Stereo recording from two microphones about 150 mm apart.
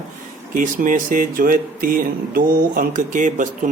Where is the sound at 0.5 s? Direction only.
65° right (ahead or behind).